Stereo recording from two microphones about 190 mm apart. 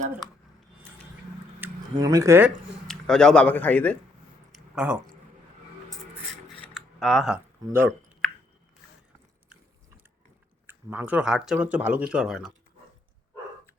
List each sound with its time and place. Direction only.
1.9 s speech: 20° right (ahead or behind)
2.8 s speech: 5° left (ahead or behind)
4.5 s a sound: 5° right (ahead or behind)
6.6 s a sound: centre (ahead or behind)
8.2 s chewing: 5° left (ahead or behind)
10.7 s speech: 10° right (ahead or behind)